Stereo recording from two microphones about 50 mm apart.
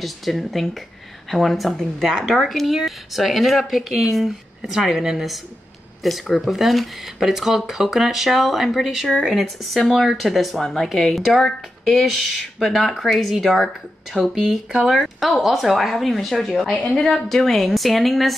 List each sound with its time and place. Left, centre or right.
0.0 s speech: centre